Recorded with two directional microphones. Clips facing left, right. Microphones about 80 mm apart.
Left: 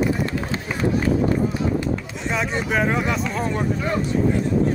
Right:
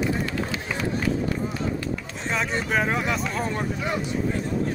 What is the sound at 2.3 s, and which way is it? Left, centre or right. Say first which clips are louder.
Speech: left 2 dB; centre.